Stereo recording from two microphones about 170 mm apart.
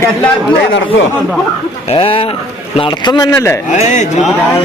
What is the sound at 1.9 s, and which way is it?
Speech, 35° left (ahead or behind).